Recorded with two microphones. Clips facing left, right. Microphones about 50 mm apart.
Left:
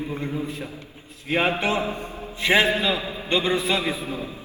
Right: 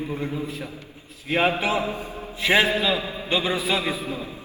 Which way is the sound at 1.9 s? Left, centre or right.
Left.